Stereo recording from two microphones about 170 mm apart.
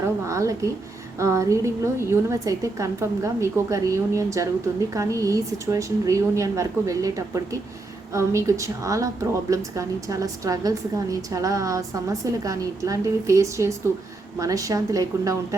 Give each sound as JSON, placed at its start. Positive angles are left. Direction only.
{"t": 0.3, "sound": "a woman's voice", "side_deg": -20}